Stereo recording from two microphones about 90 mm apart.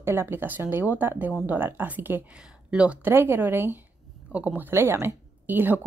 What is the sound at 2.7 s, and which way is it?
Speech, 10° right (ahead or behind).